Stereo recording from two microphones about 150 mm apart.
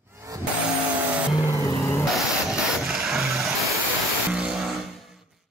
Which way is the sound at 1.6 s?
20° left (ahead or behind).